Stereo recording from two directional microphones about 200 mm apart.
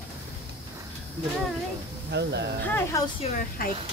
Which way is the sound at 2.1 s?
60° right (ahead or behind).